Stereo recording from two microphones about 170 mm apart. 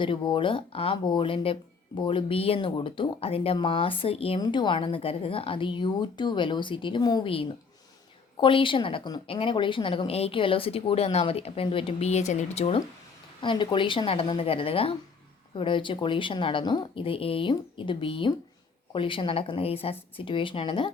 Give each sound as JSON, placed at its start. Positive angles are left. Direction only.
{"t": 0.0, "sound": "a woman's voice", "side_deg": 30}
{"t": 13.4, "sound": "a woman's voice", "side_deg": 30}